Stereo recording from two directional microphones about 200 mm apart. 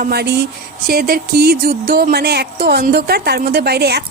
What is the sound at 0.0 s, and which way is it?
Speech, 55° right (ahead or behind).